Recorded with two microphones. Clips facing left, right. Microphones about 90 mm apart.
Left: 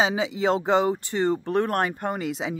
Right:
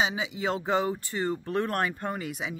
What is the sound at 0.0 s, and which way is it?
Speech, 35° left (ahead or behind).